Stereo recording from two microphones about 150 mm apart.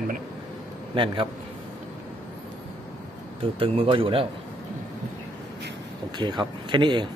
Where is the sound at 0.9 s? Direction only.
35° right (ahead or behind).